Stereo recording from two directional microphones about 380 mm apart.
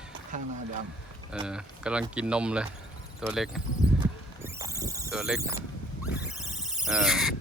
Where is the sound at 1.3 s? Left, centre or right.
Centre.